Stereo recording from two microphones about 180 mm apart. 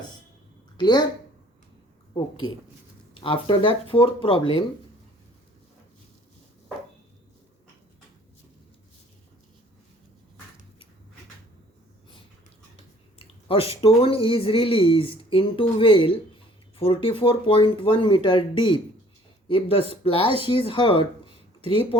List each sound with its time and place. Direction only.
0.8 s speech: 25° left (ahead or behind)
3.2 s speech: 30° left (ahead or behind)
13.1 s speech: 30° left (ahead or behind)